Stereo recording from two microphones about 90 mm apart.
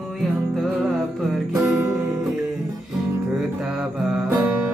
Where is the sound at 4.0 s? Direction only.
5° right (ahead or behind).